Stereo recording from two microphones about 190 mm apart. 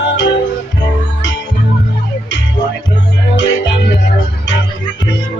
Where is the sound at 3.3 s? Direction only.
70° left (ahead or behind).